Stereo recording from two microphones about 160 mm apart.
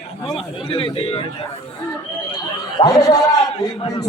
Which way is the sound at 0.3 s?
35° left (ahead or behind).